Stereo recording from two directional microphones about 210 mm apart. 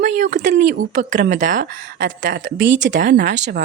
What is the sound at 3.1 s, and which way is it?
Speech, 55° right (ahead or behind).